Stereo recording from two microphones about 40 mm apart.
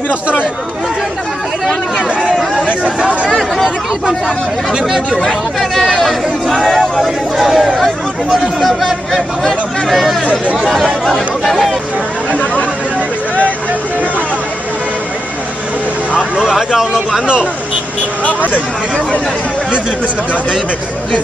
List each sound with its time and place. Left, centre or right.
0.1 s speech: right
2.0 s chatter: right
2.8 s speech: right
5.6 s a sound: centre
7.0 s speech: centre
11.4 s speech: centre
12.3 s speech: left
16.2 s speech: centre